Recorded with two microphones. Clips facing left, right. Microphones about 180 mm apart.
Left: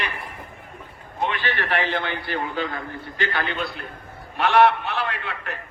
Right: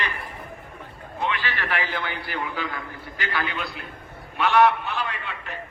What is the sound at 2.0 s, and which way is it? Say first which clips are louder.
A man's voice: left 3 dB; 25° left (ahead or behind).